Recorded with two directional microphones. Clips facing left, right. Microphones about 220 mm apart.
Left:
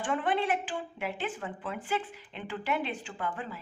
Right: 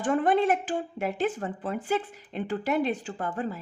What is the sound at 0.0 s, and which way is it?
Speech, 45° right (ahead or behind).